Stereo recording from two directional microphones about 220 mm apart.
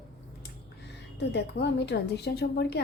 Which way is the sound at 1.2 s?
50° left (ahead or behind).